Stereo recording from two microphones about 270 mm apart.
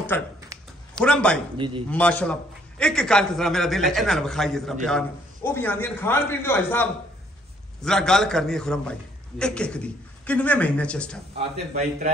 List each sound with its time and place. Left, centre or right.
0.1 s a man's voice: centre
0.5 s a sound: centre
0.9 s a man's voice: centre
11.3 s a man's voice: right